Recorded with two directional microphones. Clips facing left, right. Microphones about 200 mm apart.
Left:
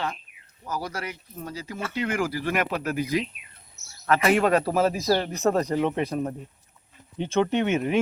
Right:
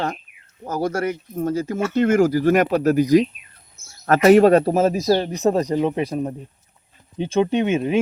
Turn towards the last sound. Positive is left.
turn(degrees=-25)  # may be behind; listen again after turning